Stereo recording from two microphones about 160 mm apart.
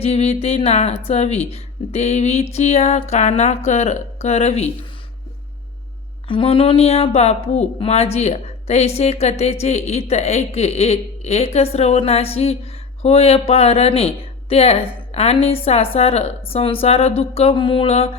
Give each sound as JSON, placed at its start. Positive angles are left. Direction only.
{"t": 0.0, "sound": "speech", "side_deg": 40}
{"t": 6.2, "sound": "speech", "side_deg": 35}